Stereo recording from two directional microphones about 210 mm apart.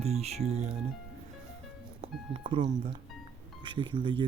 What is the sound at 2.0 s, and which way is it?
Speech, 25° right (ahead or behind).